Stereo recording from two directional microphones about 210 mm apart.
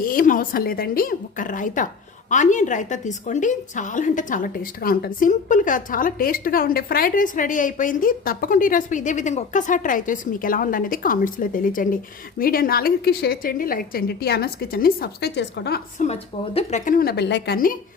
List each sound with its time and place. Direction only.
0.0 s a woman's voice: 40° left (ahead or behind)
16.0 s a woman's voice: 30° left (ahead or behind); by 17.7 s 45° left (ahead or behind)